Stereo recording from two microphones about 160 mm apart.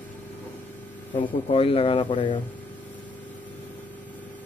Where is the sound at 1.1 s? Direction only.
35° left (ahead or behind).